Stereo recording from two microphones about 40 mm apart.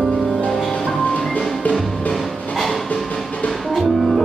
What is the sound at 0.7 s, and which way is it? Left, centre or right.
Music, centre.